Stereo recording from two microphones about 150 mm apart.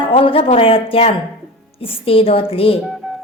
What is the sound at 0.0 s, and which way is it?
A woman's voice, 35° left (ahead or behind).